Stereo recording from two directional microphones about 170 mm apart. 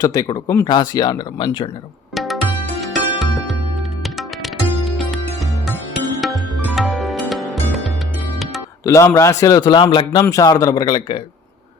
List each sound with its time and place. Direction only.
0.0 s a man's voice: 20° left (ahead or behind)
2.1 s music: centre (ahead or behind)
8.8 s a man's voice: 15° left (ahead or behind)